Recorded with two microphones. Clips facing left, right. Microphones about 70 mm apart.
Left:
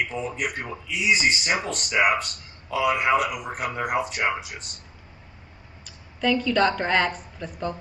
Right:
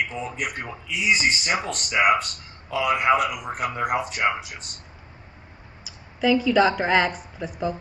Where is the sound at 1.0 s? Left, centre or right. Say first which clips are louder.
Even; right.